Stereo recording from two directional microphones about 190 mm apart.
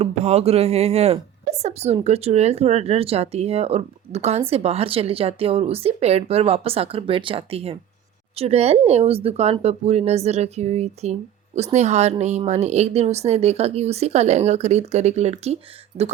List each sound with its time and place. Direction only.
0.0 s a woman's voice: 35° right (ahead or behind)